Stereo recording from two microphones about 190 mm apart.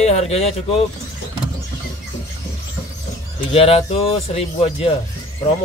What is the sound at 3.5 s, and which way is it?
A man's voice, 30° left (ahead or behind).